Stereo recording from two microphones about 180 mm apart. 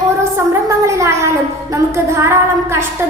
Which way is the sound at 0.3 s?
15° right (ahead or behind).